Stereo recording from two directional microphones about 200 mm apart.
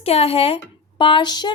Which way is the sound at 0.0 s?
30° left (ahead or behind).